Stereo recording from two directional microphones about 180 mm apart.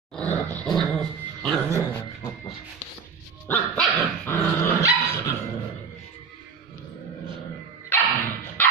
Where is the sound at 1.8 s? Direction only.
10° left (ahead or behind).